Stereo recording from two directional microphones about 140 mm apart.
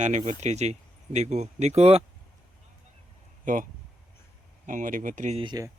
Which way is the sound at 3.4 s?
70° right (ahead or behind).